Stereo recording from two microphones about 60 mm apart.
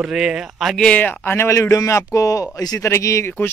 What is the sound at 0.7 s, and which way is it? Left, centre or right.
Speech, left.